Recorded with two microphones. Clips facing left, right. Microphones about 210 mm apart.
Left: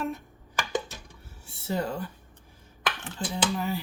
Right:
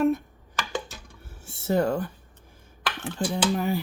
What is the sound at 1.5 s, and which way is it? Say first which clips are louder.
Speech: right 7 dB; 50° right (ahead or behind).